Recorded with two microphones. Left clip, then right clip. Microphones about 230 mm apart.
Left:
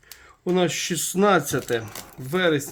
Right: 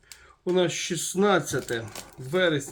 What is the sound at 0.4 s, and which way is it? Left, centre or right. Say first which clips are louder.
Speech: left 2 dB; left.